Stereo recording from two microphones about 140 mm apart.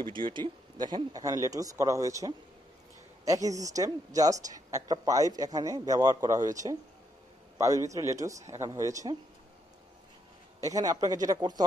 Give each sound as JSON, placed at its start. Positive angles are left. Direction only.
{"t": 0.0, "sound": "speech", "side_deg": -35}
{"t": 10.6, "sound": "speech", "side_deg": -25}